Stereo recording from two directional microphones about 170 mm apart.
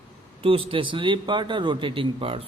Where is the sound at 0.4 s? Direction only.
35° right (ahead or behind).